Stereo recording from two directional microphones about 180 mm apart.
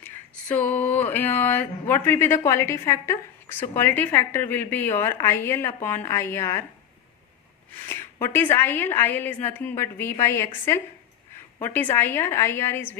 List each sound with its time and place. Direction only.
0.0 s a woman's voice: 10° left (ahead or behind)
7.9 s a woman's voice: 10° left (ahead or behind)
11.6 s a woman's voice: 10° left (ahead or behind)